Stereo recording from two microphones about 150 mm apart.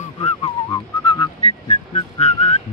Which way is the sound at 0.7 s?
25° left (ahead or behind).